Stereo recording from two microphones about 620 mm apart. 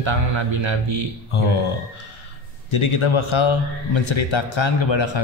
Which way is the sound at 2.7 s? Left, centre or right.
Left.